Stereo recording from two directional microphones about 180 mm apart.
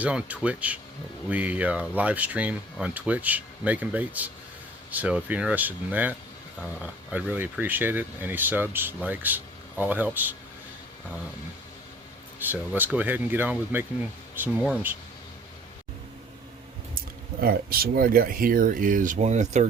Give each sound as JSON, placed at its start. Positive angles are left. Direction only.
{"t": 0.0, "sound": "speech", "side_deg": -5}
{"t": 12.5, "sound": "speech", "side_deg": -10}
{"t": 17.4, "sound": "speech", "side_deg": -55}